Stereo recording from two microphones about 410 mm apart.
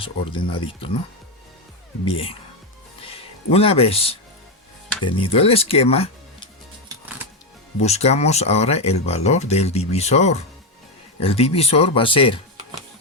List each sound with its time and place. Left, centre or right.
0.0 s speech: centre
2.0 s speech: centre
3.0 s music: centre
4.9 s speech: centre
7.8 s speech: centre